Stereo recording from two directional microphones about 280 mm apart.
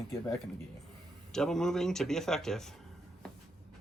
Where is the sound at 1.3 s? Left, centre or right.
Centre.